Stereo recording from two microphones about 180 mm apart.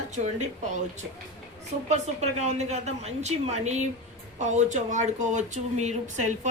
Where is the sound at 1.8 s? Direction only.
40° right (ahead or behind).